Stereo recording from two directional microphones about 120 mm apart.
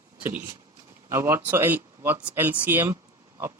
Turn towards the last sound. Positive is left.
turn(degrees=-20)  # may be behind; listen again after turning